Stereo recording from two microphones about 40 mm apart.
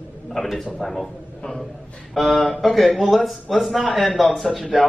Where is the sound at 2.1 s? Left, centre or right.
Centre.